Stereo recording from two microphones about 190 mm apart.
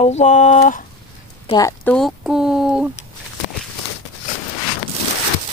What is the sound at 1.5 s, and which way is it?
Speech, 15° left (ahead or behind).